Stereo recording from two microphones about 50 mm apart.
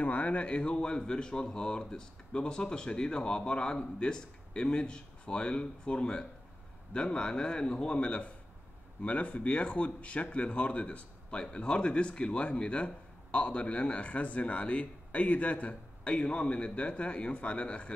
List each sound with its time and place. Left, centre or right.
0.0 s speech: left